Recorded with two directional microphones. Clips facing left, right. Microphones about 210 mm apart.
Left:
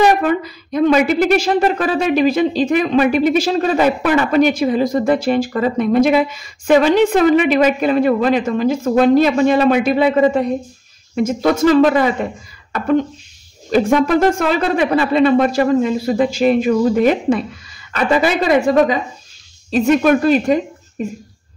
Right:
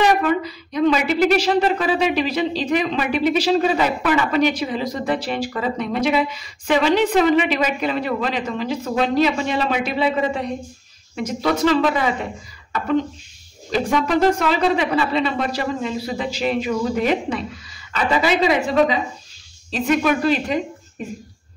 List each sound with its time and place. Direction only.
0.0 s a woman's voice: 45° left (ahead or behind)
13.7 s a woman's voice: 50° left (ahead or behind)